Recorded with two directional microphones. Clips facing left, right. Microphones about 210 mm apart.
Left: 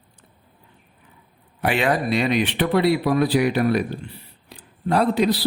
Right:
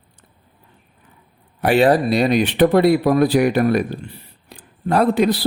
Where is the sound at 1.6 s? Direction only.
40° right (ahead or behind).